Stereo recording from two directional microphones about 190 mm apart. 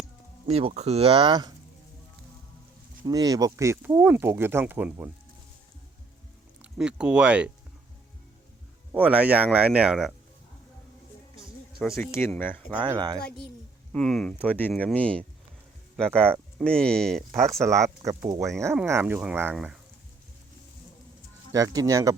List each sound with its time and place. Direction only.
0.4 s speech: 30° right (ahead or behind)
3.0 s speech: 20° right (ahead or behind)
6.6 s speech: 5° right (ahead or behind)
8.9 s speech: 10° right (ahead or behind)
11.9 s speech: 15° left (ahead or behind)
12.8 s speech: 25° right (ahead or behind)
13.1 s a woman's voice: 55° left (ahead or behind)
13.9 s speech: 5° left (ahead or behind)
17.6 s speech: 15° right (ahead or behind)
21.5 s speech: 20° right (ahead or behind)